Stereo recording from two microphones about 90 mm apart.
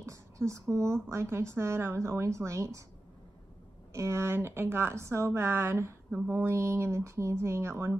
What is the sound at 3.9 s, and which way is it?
A woman's voice, 30° right (ahead or behind).